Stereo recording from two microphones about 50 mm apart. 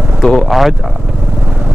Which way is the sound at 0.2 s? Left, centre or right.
Centre.